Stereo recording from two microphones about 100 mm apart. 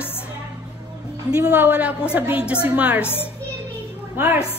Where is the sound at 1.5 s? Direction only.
20° right (ahead or behind).